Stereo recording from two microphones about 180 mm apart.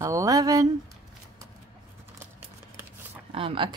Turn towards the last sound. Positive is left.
turn(degrees=-30)  # may be behind; listen again after turning